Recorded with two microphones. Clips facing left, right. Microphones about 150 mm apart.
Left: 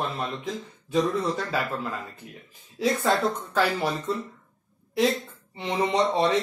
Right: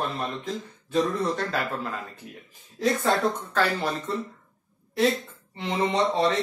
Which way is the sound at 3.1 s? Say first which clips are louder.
Even; 10° left (ahead or behind).